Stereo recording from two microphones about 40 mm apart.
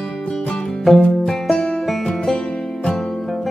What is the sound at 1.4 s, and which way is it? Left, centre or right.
Music, centre.